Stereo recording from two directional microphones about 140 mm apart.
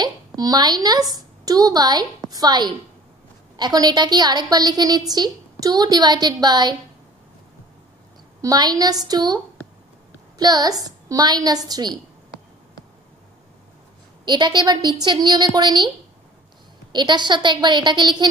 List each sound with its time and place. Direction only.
0.0 s a woman's voice: 30° right (ahead or behind)
8.4 s a woman's voice: 25° right (ahead or behind)
10.4 s a woman's voice: 25° right (ahead or behind)
14.2 s a woman's voice: 30° right (ahead or behind)
16.9 s a woman's voice: 30° right (ahead or behind)